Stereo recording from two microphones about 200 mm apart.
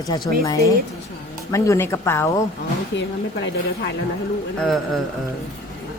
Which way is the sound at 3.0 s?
65° left (ahead or behind).